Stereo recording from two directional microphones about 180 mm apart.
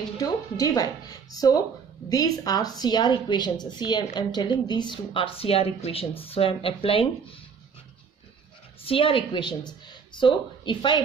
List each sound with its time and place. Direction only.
0.2 s a woman's voice: 20° left (ahead or behind)
8.8 s a woman's voice: 30° left (ahead or behind)